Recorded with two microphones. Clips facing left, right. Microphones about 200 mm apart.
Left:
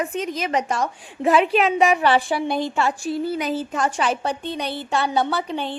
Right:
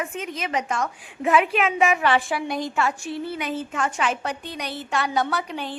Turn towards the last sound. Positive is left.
turn(degrees=25)  # may be behind; listen again after turning